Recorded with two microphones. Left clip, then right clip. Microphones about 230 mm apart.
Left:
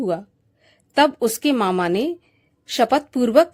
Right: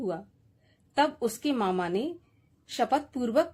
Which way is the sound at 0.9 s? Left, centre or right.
Left.